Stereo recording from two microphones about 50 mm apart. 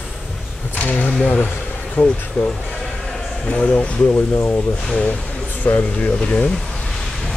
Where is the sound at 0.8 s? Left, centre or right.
Left.